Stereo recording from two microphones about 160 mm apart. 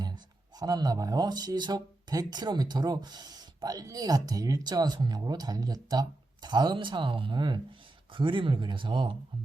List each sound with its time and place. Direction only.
0.6 s speech: 25° right (ahead or behind)